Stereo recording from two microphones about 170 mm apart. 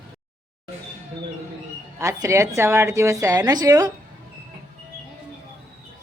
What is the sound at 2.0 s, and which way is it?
A woman's voice, 15° right (ahead or behind).